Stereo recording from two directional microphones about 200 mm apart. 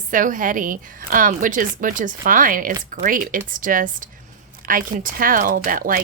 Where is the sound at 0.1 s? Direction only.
40° right (ahead or behind).